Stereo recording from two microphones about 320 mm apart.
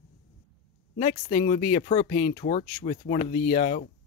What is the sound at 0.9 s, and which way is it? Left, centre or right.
Speech, centre.